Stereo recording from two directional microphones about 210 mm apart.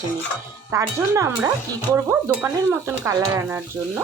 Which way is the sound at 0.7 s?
15° right (ahead or behind).